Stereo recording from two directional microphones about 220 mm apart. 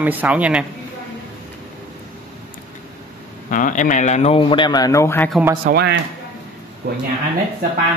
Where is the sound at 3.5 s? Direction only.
35° left (ahead or behind); by 5.3 s 10° left (ahead or behind).